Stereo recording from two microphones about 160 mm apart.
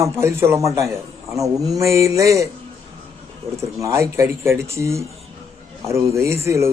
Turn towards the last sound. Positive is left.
turn(degrees=-15)  # may be behind; listen again after turning